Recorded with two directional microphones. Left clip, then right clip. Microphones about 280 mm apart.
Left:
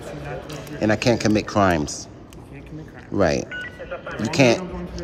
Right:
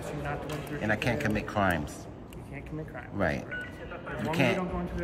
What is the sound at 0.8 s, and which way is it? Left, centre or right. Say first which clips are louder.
Speech: left 10 dB; centre.